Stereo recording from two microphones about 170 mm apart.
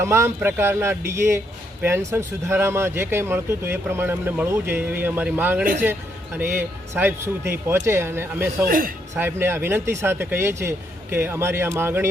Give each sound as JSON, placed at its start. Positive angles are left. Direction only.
{"t": 0.0, "sound": "speech", "side_deg": -15}
{"t": 8.6, "sound": "a man's voice", "side_deg": -55}
{"t": 9.1, "sound": "speech", "side_deg": -15}